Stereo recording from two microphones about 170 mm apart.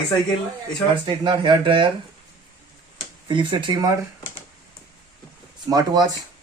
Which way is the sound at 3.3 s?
30° right (ahead or behind).